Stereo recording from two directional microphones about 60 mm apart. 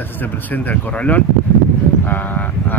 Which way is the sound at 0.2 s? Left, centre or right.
Left.